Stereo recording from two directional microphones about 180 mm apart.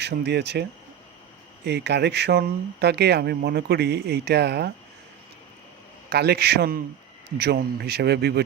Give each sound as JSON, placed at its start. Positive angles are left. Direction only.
{"t": 0.0, "sound": "speech", "side_deg": -70}
{"t": 6.1, "sound": "speech", "side_deg": -60}